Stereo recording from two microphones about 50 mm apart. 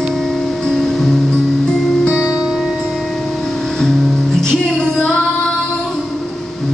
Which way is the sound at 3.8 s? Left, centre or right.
Centre.